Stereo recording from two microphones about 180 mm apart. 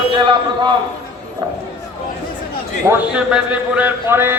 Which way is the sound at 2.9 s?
5° right (ahead or behind).